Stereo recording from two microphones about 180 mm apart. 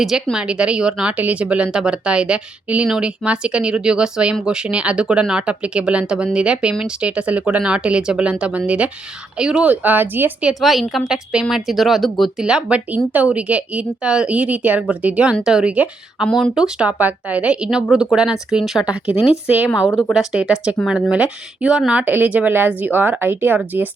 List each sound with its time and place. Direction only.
0.0 s a woman's voice: centre (ahead or behind)
10.6 s a woman's voice: centre (ahead or behind)
19.1 s speech: 35° left (ahead or behind)
19.5 s a woman's voice: 5° right (ahead or behind)